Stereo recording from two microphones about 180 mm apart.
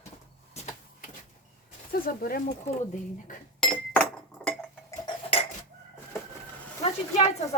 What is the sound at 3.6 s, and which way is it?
Chink, 5° left (ahead or behind).